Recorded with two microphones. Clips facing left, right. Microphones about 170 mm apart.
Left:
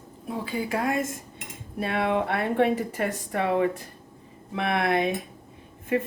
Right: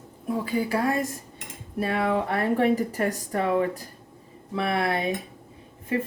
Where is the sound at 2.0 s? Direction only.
40° right (ahead or behind).